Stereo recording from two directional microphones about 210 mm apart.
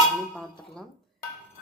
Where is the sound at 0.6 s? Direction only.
Centre (ahead or behind).